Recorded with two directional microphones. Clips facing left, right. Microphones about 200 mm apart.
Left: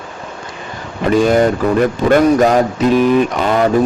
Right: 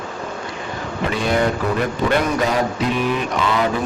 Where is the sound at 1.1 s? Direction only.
45° left (ahead or behind).